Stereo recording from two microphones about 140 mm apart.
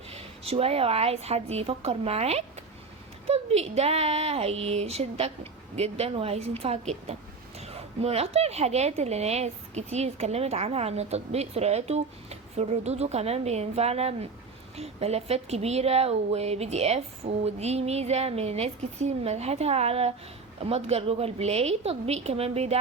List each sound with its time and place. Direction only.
0.1 s a woman's voice: 45° right (ahead or behind)